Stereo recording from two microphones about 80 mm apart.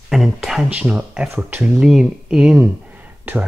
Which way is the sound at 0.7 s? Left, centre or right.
Centre.